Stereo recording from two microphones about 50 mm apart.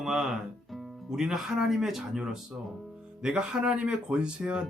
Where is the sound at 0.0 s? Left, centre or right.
Centre.